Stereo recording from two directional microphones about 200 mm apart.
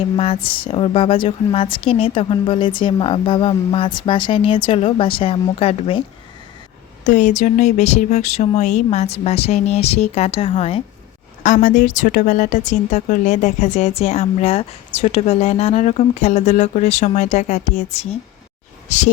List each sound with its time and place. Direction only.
0.4 s a woman's voice: 25° left (ahead or behind)
7.0 s speech: 40° left (ahead or behind)
11.4 s speech: 40° left (ahead or behind)